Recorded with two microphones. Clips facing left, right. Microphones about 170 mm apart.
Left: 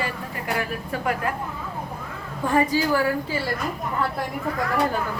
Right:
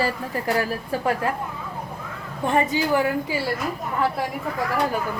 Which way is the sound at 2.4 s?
20° right (ahead or behind).